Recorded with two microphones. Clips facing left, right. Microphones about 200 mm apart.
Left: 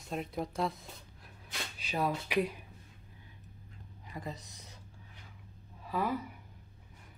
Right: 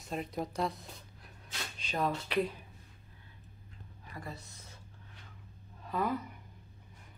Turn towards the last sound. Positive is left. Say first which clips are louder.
# even
turn(degrees=5)  # may be behind; listen again after turning